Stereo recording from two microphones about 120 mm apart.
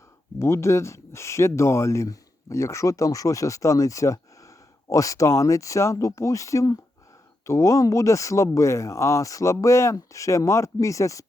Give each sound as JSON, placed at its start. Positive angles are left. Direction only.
{"t": 0.3, "sound": "speech", "side_deg": 25}